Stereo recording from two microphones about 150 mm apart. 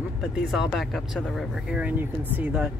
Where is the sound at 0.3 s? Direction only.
Centre (ahead or behind).